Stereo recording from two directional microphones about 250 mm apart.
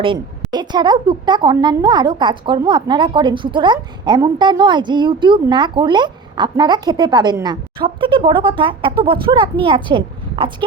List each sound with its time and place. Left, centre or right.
0.5 s a woman's voice: centre